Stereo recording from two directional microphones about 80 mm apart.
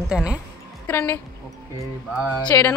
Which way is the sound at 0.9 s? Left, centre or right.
Left.